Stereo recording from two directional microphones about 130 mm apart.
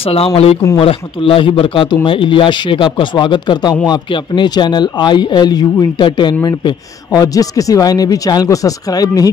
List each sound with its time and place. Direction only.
0.0 s a man's voice: 50° left (ahead or behind); by 9.3 s 30° left (ahead or behind)